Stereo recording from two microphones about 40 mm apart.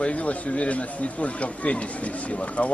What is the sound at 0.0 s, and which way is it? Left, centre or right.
A man's voice, left.